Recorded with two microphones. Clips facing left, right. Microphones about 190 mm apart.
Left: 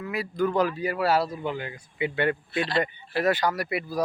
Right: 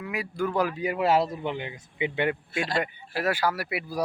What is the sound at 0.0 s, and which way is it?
Speech, 10° right (ahead or behind).